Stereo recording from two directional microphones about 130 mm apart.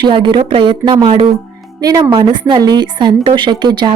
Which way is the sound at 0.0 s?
35° right (ahead or behind).